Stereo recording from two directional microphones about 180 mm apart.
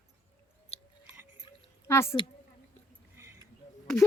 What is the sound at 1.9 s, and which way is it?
Speech, 15° left (ahead or behind).